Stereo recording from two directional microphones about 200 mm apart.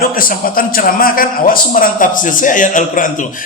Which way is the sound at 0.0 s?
45° left (ahead or behind).